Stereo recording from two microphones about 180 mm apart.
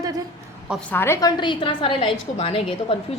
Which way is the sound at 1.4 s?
25° left (ahead or behind).